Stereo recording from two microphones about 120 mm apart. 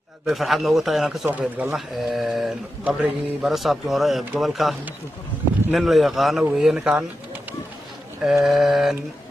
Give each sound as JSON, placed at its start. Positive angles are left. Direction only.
{"t": 0.3, "sound": "speech", "side_deg": 0}
{"t": 8.2, "sound": "speech", "side_deg": 0}